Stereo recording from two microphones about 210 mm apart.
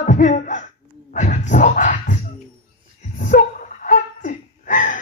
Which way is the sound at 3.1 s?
40° left (ahead or behind).